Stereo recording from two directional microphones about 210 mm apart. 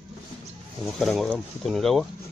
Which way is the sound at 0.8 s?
Centre (ahead or behind).